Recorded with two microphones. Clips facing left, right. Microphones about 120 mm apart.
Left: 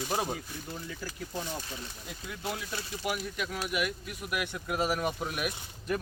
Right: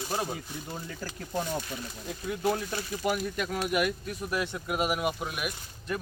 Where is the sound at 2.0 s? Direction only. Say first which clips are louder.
Right 10 dB; 35° right (ahead or behind); by 4.2 s 50° right (ahead or behind).